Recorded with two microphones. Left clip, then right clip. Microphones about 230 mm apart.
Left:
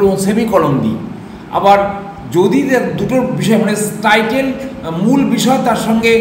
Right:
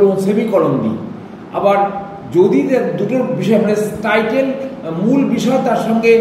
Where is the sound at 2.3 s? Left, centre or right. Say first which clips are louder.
Even; centre.